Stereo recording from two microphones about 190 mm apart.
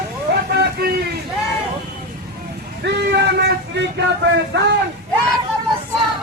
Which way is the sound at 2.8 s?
60° right (ahead or behind).